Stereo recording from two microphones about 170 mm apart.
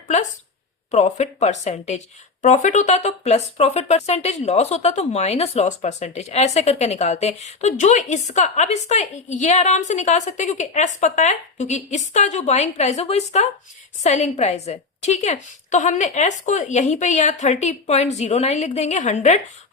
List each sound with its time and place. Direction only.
0.9 s a woman's voice: 45° left (ahead or behind)